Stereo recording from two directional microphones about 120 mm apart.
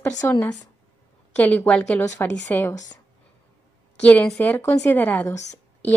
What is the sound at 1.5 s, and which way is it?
A woman's voice, 15° left (ahead or behind).